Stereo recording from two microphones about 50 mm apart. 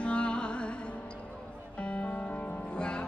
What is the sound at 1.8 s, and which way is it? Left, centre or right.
Music, left.